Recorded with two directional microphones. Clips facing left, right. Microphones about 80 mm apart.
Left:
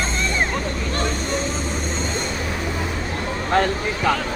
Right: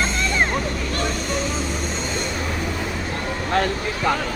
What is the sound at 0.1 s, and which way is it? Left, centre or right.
Vehicle, left.